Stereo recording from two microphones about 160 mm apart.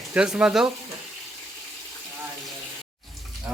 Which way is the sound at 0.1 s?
10° right (ahead or behind).